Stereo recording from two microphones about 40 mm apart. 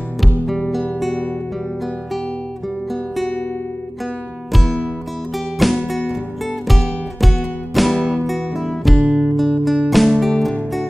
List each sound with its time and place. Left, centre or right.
0.5 s music: centre
4.5 s music: centre
9.0 s music: right
9.3 s music: centre